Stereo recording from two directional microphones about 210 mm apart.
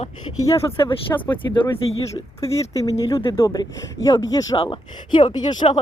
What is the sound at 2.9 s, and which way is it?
Speech, 15° left (ahead or behind).